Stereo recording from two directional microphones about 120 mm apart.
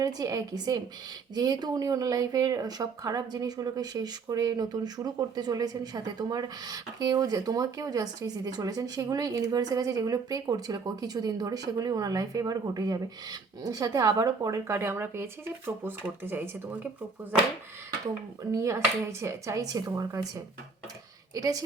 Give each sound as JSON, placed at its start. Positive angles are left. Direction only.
{"t": 0.0, "sound": "speech", "side_deg": -30}
{"t": 18.5, "sound": "speech", "side_deg": -25}
{"t": 19.7, "sound": "speech", "side_deg": -35}